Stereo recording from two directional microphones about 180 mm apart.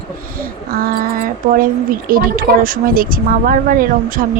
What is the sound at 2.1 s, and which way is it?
A woman's voice, 50° right (ahead or behind).